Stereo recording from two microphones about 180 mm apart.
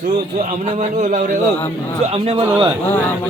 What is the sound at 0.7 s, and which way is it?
Speech, 45° right (ahead or behind).